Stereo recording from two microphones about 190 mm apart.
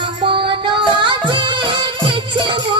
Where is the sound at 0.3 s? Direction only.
25° right (ahead or behind).